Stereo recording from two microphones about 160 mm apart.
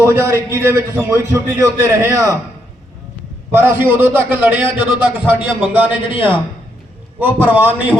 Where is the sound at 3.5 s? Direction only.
15° right (ahead or behind).